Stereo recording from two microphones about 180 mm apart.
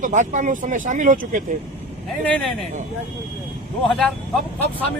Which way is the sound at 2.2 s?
5° left (ahead or behind).